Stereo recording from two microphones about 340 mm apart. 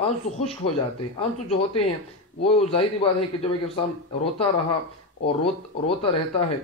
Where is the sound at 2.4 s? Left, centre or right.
Centre.